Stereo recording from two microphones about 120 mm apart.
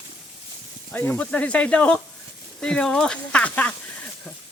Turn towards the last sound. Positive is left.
turn(degrees=10)  # may be behind; listen again after turning